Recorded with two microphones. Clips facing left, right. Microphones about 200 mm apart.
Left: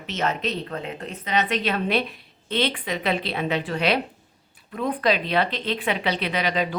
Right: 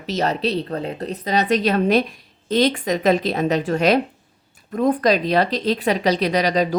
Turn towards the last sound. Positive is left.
turn(degrees=-40)  # may be behind; listen again after turning